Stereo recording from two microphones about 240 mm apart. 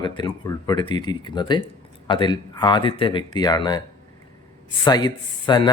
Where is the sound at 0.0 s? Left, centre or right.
Centre.